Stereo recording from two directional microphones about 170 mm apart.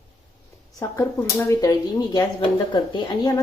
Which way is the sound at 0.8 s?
15° left (ahead or behind).